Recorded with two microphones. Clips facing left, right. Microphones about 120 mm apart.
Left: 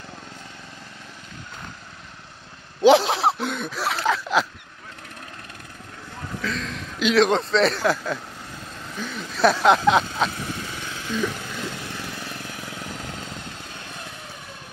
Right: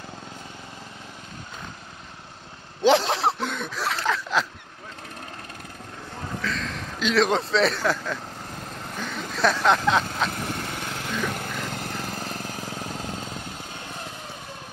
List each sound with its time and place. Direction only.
2.8 s speech: 10° left (ahead or behind)
6.4 s a sound: 10° left (ahead or behind)
7.2 s a man's voice: 5° right (ahead or behind)
9.4 s speech: 10° left (ahead or behind)
10.3 s lawn mower: 55° right (ahead or behind); by 13.3 s 30° right (ahead or behind)